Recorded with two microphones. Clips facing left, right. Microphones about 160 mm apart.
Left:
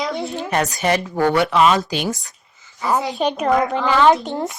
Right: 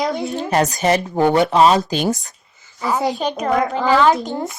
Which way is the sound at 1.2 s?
20° right (ahead or behind).